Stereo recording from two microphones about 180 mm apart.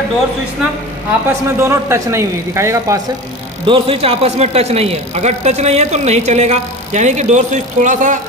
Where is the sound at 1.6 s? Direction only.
15° right (ahead or behind).